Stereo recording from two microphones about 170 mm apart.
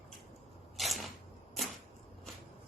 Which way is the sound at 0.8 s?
Centre (ahead or behind).